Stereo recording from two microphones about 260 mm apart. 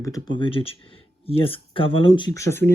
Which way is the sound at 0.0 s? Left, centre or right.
Centre.